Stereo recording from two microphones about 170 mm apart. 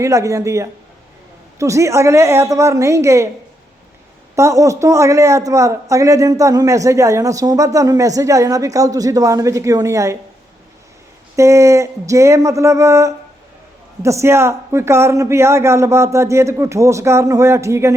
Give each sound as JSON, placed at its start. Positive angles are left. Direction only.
{"t": 0.0, "sound": "a man's voice", "side_deg": -20}
{"t": 4.4, "sound": "speech", "side_deg": -15}
{"t": 11.3, "sound": "a man's voice", "side_deg": -15}